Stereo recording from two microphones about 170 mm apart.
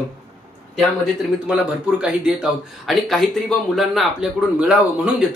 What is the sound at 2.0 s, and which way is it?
Speech, 5° right (ahead or behind).